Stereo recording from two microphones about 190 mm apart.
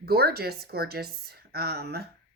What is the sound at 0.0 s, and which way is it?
A woman's voice, 55° right (ahead or behind).